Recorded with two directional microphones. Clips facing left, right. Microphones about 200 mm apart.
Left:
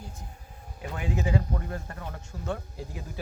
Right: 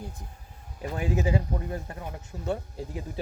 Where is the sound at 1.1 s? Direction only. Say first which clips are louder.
Right 1 dB; 20° right (ahead or behind).